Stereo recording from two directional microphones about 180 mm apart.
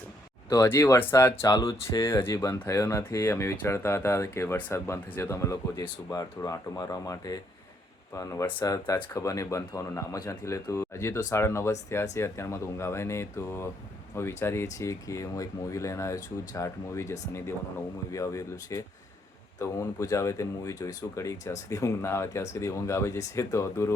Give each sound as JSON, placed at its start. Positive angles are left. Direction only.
{"t": 0.5, "sound": "speech", "side_deg": 15}